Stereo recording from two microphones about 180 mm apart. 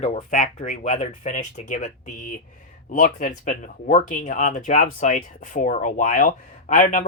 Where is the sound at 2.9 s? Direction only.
45° left (ahead or behind).